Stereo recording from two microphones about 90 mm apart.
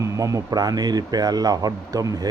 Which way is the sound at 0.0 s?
40° right (ahead or behind).